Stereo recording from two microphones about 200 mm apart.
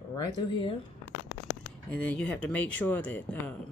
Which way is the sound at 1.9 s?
5° left (ahead or behind).